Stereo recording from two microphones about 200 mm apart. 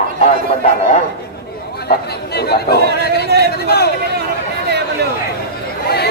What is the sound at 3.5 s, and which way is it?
Speech, 55° left (ahead or behind).